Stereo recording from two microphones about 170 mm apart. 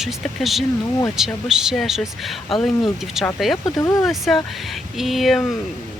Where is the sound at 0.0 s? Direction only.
Centre (ahead or behind).